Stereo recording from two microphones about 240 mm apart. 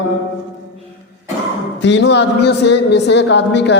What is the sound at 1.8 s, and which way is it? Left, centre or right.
A man's voice, left.